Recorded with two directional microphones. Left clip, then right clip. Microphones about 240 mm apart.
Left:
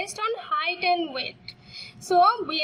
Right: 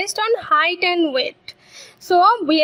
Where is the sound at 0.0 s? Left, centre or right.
Right.